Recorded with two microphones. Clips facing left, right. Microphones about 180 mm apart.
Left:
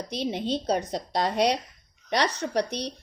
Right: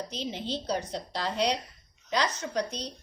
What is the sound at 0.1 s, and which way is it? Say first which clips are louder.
A woman's voice: left 6 dB; 60° left (ahead or behind).